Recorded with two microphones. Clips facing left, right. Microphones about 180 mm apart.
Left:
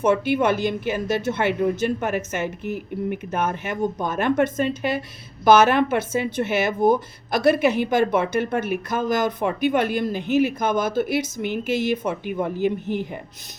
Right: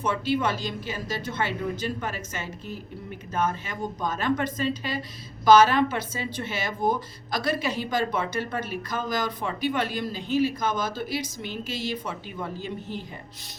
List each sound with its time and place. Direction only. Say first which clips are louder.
0.1 s speech: left 5 dB; 55° left (ahead or behind)